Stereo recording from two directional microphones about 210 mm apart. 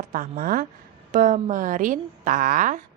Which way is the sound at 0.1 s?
40° right (ahead or behind).